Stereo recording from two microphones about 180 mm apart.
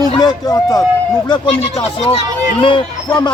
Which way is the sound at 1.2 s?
30° left (ahead or behind).